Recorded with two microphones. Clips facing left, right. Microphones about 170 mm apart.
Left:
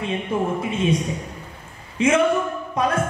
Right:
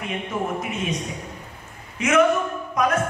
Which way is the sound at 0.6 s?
30° left (ahead or behind).